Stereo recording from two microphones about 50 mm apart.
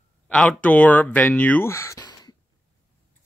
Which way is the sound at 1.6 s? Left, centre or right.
Left.